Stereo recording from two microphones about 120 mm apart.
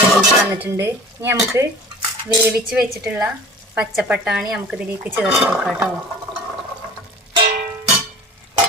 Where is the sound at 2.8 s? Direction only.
15° right (ahead or behind).